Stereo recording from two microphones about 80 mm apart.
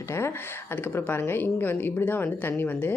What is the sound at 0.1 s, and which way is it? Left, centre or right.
A woman's voice, left.